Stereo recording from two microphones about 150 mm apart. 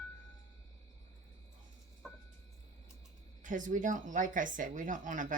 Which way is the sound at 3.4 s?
60° right (ahead or behind).